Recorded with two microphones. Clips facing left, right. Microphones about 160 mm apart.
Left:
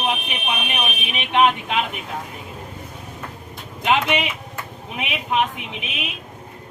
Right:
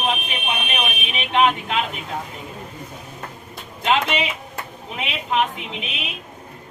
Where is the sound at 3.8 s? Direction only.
15° left (ahead or behind).